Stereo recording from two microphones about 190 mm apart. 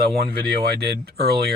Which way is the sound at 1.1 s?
55° right (ahead or behind).